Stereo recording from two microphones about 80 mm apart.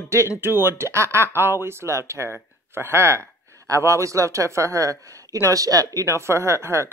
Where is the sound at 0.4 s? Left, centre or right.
Right.